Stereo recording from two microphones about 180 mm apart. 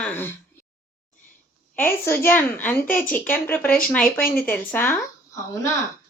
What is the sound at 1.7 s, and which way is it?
Speech, 10° left (ahead or behind).